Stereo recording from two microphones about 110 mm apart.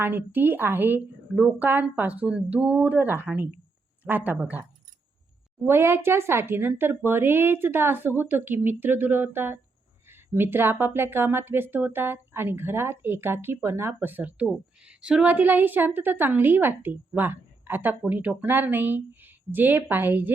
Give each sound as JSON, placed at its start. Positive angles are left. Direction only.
{"t": 0.0, "sound": "speech", "side_deg": -15}
{"t": 5.6, "sound": "speech", "side_deg": -20}